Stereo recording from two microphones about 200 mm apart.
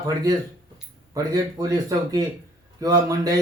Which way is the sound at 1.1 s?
15° right (ahead or behind).